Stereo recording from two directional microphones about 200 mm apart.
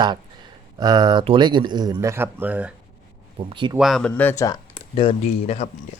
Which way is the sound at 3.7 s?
Centre (ahead or behind).